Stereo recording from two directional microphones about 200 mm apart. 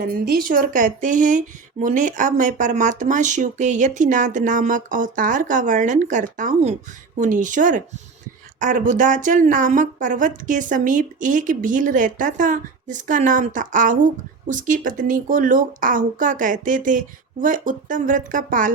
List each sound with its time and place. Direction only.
0.0 s speech: 50° right (ahead or behind)